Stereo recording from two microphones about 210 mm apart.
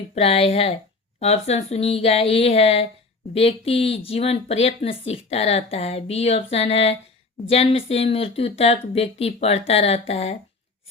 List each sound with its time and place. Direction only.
0.1 s speech: 30° left (ahead or behind)